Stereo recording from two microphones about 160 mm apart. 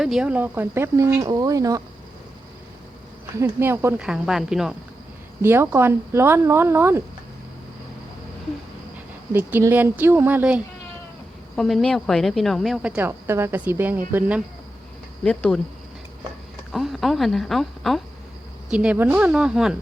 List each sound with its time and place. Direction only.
0.0 s speech: 5° right (ahead or behind); by 1.8 s 20° right (ahead or behind)
3.3 s speech: 15° right (ahead or behind)
4.0 s a woman's voice: 5° right (ahead or behind)
5.4 s speech: 15° right (ahead or behind)
9.3 s speech: 10° right (ahead or behind)
11.5 s a woman's voice: 5° left (ahead or behind)
15.2 s a woman's voice: 5° left (ahead or behind)
16.7 s a woman's voice: centre (ahead or behind)